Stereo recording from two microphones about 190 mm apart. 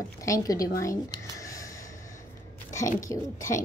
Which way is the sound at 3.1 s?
15° left (ahead or behind).